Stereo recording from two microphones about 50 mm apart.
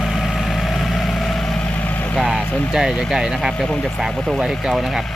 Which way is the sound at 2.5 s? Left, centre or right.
Left.